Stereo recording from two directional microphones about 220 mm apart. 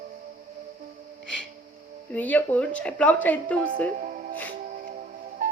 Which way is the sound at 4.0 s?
35° right (ahead or behind).